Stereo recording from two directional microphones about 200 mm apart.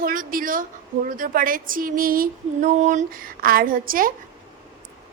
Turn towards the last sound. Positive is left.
turn(degrees=-45)  # may be behind; listen again after turning